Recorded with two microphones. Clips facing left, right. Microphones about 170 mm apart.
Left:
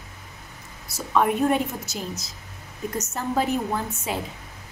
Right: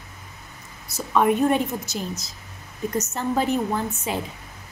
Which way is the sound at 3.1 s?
Centre (ahead or behind).